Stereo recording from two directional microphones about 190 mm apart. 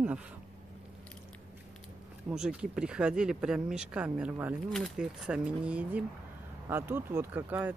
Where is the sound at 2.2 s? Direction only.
5° right (ahead or behind).